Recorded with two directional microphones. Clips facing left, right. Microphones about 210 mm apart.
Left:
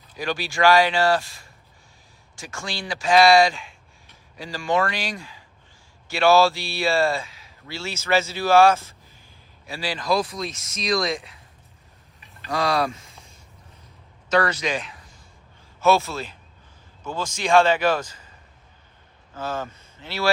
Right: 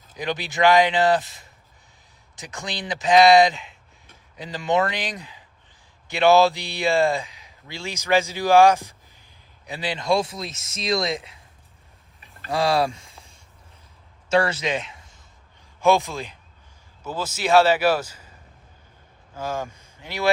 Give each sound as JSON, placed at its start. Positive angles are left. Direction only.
{"t": 0.2, "sound": "a man's voice", "side_deg": -20}
{"t": 12.5, "sound": "speech", "side_deg": -30}
{"t": 13.0, "sound": "a sound", "side_deg": 0}
{"t": 14.3, "sound": "a man's voice", "side_deg": -25}
{"t": 19.3, "sound": "speech", "side_deg": -10}